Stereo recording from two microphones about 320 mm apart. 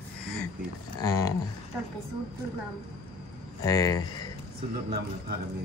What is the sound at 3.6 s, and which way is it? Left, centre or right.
Speech, centre.